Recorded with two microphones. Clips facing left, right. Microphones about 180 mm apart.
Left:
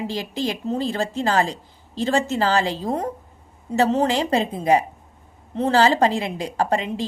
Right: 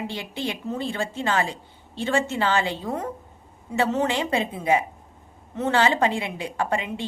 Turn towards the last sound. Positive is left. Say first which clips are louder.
# left 4 dB
turn(degrees=35)  # may be behind; listen again after turning